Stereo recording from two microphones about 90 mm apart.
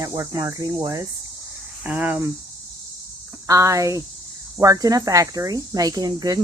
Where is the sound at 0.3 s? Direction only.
45° right (ahead or behind).